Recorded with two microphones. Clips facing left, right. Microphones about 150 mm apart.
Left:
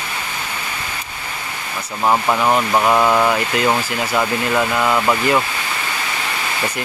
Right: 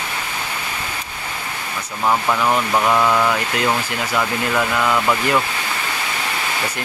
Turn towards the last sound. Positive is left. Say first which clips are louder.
# left 2 dB
turn(degrees=15)  # may be behind; listen again after turning